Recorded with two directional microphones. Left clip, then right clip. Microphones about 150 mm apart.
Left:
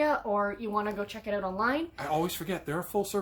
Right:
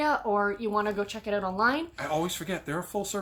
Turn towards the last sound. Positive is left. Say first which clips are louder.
# left 1 dB
turn(degrees=15)  # may be behind; listen again after turning